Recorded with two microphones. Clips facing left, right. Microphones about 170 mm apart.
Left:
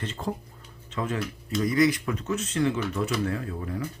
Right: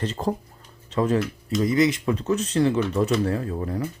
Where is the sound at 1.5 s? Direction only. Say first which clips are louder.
Right 1 dB; 25° right (ahead or behind).